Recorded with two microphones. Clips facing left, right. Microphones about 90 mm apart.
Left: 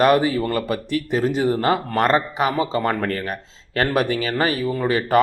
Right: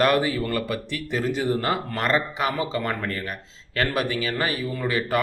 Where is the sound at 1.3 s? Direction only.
25° left (ahead or behind).